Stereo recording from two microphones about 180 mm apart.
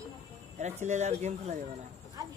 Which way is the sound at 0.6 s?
40° right (ahead or behind).